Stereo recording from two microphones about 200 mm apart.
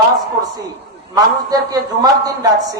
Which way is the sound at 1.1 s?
20° right (ahead or behind).